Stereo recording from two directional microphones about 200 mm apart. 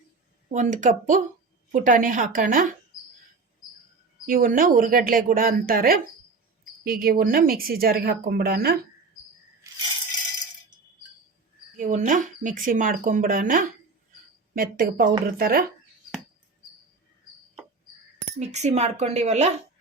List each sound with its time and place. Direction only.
0.4 s speech: 40° right (ahead or behind)
4.3 s speech: 45° right (ahead or behind)
11.8 s speech: 40° right (ahead or behind)
18.3 s speech: 35° right (ahead or behind)